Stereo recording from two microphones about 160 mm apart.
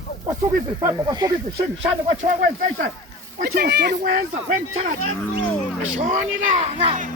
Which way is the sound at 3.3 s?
70° right (ahead or behind).